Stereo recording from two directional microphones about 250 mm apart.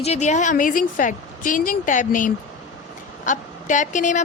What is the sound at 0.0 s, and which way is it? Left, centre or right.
A woman's voice, left.